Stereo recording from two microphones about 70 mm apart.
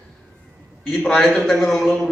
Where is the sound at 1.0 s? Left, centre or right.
Centre.